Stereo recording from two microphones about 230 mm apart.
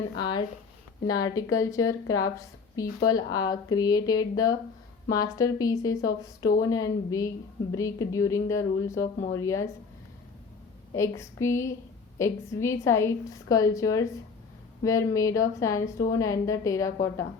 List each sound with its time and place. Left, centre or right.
0.2 s a woman's voice: centre
10.9 s a woman's voice: centre